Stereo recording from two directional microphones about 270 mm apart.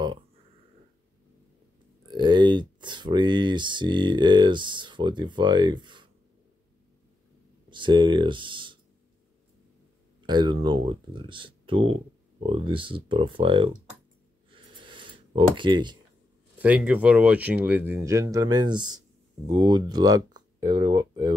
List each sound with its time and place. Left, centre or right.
2.0 s speech: centre
7.7 s speech: centre
10.2 s speech: centre
14.5 s a sound: centre
16.5 s speech: centre